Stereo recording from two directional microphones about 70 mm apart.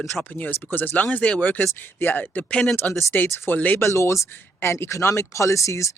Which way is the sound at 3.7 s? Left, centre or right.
Left.